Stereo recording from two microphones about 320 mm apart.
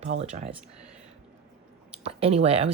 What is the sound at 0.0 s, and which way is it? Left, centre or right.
Speech, right.